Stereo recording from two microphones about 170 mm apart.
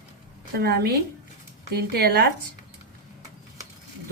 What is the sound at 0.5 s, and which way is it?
Speech, 70° right (ahead or behind).